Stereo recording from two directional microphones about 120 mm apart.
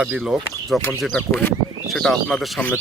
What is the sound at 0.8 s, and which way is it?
Speech, 15° left (ahead or behind).